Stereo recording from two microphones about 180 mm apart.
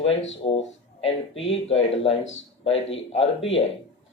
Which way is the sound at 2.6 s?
35° left (ahead or behind).